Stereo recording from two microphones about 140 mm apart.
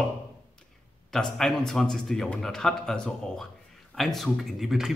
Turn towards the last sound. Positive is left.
turn(degrees=0)  # may be behind; listen again after turning